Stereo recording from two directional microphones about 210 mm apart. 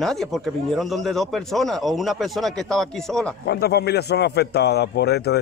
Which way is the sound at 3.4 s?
50° left (ahead or behind).